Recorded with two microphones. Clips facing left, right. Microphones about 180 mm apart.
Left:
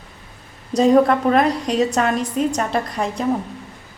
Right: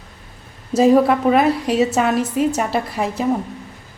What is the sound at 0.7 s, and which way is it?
A woman's voice, 5° right (ahead or behind).